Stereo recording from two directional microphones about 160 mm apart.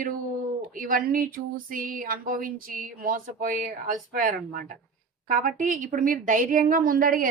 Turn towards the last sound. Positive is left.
turn(degrees=-60)  # may be behind; listen again after turning